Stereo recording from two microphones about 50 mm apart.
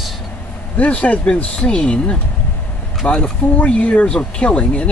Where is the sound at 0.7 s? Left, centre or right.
Left.